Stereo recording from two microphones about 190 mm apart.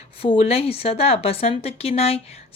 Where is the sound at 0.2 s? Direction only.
30° left (ahead or behind).